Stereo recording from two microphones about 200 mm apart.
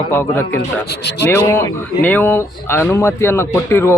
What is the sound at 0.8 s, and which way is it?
Speech, 55° left (ahead or behind).